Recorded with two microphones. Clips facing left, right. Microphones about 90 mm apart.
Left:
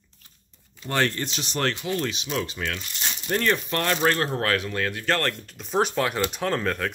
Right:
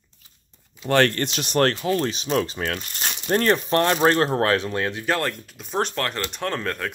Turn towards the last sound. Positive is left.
turn(degrees=0)  # may be behind; listen again after turning